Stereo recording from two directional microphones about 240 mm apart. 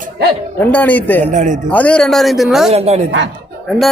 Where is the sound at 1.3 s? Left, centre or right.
Right.